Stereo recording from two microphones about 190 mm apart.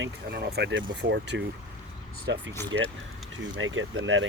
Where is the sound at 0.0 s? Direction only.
60° right (ahead or behind).